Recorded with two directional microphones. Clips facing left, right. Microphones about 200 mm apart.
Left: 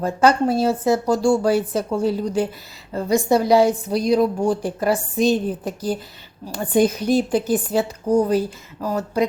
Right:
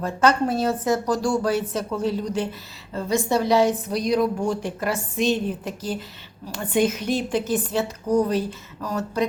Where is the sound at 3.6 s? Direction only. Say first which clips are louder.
Left 3 dB; 30° left (ahead or behind).